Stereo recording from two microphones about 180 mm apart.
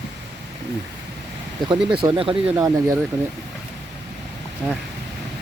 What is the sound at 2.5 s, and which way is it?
Speech, 20° right (ahead or behind).